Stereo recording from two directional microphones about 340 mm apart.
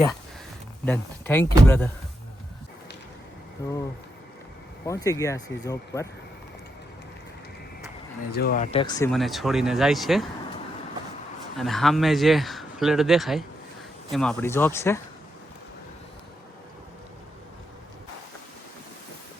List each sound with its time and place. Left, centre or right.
0.9 s a man's voice: centre
3.6 s speech: centre
4.9 s speech: centre
8.3 s speech: left
9.1 s a man's voice: centre
11.5 s a man's voice: centre